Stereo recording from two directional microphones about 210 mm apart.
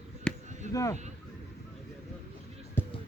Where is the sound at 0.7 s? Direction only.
15° left (ahead or behind).